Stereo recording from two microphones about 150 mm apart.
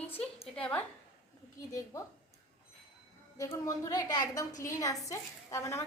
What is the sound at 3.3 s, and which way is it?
A woman's voice, 20° left (ahead or behind).